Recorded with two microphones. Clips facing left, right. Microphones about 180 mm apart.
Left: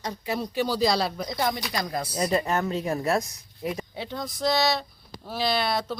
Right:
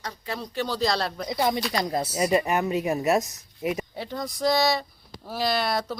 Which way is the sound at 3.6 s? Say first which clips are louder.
Right 3 dB; 15° right (ahead or behind).